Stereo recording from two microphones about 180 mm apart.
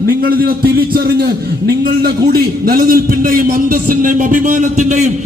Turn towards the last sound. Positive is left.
turn(degrees=-40)  # may be behind; listen again after turning